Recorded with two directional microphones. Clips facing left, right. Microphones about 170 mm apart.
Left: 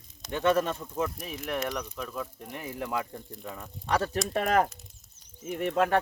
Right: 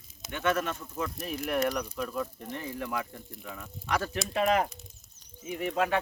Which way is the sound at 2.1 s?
5° left (ahead or behind).